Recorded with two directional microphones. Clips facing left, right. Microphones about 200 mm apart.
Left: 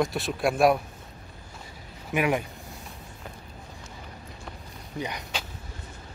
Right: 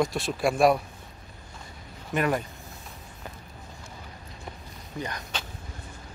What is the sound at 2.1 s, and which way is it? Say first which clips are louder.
Speech: left 1 dB; 10° left (ahead or behind).